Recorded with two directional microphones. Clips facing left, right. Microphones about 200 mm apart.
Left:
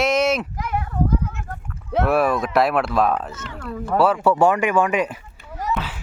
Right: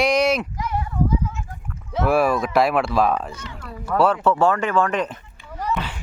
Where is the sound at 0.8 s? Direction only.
60° left (ahead or behind).